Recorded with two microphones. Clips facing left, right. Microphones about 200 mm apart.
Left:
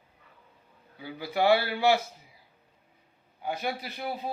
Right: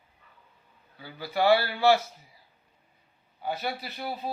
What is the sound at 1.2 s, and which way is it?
Speech, 15° left (ahead or behind).